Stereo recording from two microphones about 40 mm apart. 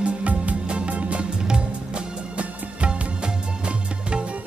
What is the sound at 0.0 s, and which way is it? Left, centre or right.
Music, right.